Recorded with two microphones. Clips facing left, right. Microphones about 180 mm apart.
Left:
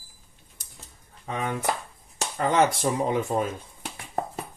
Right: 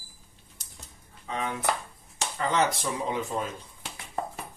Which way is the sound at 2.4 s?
50° left (ahead or behind).